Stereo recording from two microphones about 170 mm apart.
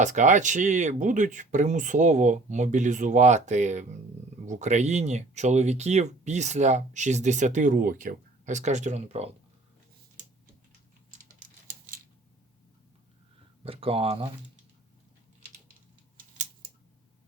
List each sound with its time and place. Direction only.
0.0 s speech: 45° right (ahead or behind)
13.7 s speech: 35° right (ahead or behind)